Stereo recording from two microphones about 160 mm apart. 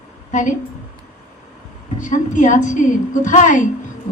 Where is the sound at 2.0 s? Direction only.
55° left (ahead or behind).